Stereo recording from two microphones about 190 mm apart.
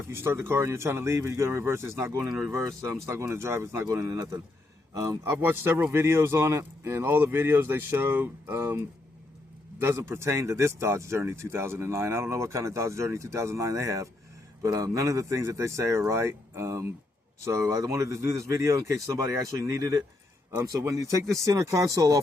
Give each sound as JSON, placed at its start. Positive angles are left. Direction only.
{"t": 0.0, "sound": "speech", "side_deg": -10}
{"t": 9.8, "sound": "speech", "side_deg": -15}